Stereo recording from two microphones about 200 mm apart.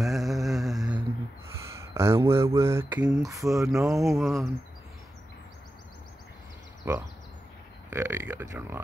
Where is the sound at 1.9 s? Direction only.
15° right (ahead or behind).